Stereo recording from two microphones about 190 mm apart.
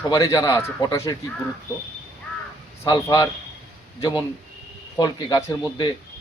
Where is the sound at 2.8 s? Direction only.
25° left (ahead or behind).